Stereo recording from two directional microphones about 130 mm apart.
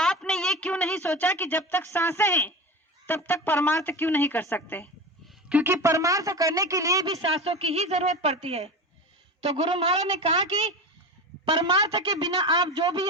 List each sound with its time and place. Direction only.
0.0 s a sound: 5° left (ahead or behind)
1.1 s a woman's voice: 15° left (ahead or behind)
5.3 s a sound: 10° right (ahead or behind)
5.7 s speech: 25° right (ahead or behind)
7.4 s a woman's voice: 50° right (ahead or behind)
11.4 s a man's voice: 40° right (ahead or behind)